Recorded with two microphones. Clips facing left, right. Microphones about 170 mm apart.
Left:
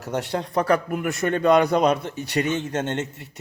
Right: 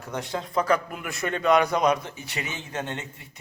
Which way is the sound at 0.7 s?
40° left (ahead or behind).